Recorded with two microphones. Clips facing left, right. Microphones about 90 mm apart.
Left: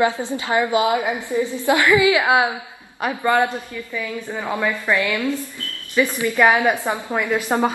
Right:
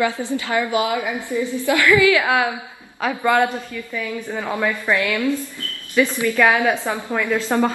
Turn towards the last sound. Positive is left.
turn(degrees=15)  # may be behind; listen again after turning